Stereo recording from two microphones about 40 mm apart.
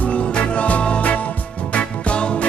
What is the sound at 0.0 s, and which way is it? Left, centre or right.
Music, left.